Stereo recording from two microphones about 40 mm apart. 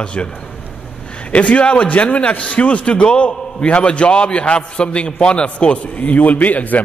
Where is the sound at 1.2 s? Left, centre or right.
Left.